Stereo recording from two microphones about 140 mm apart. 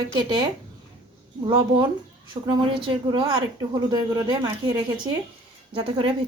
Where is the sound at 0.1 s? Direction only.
30° right (ahead or behind).